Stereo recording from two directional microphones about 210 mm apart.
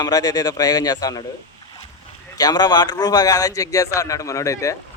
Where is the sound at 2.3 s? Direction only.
20° left (ahead or behind).